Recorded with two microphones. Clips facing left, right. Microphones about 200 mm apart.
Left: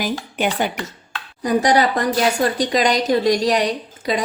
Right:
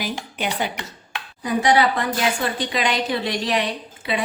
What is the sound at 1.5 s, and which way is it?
A woman's voice, 40° left (ahead or behind).